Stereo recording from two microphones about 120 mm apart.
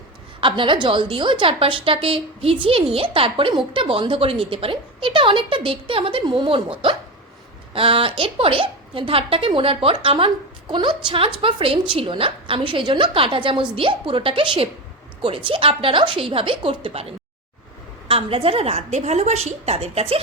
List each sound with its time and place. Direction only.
0.4 s a woman's voice: 45° right (ahead or behind); by 20.1 s 60° right (ahead or behind)